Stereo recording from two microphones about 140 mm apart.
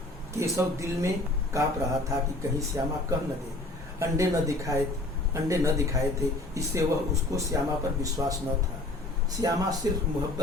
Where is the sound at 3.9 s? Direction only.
20° right (ahead or behind).